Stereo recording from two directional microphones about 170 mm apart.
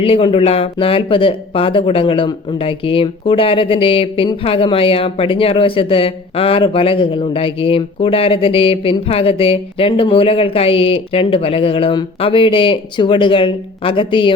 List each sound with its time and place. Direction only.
0.0 s speech: 35° left (ahead or behind)